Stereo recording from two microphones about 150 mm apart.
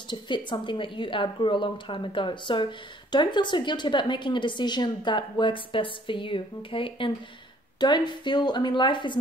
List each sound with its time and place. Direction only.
0.5 s a woman's voice: 30° left (ahead or behind)